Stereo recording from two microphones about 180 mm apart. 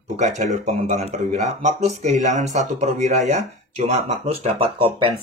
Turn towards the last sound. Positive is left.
turn(degrees=-30)  # may be behind; listen again after turning